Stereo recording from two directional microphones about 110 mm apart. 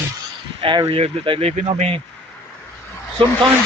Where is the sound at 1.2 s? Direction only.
60° right (ahead or behind).